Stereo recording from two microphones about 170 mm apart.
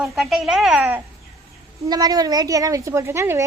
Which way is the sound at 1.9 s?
20° right (ahead or behind).